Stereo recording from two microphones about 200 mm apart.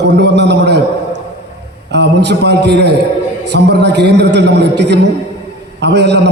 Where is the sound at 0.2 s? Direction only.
60° right (ahead or behind).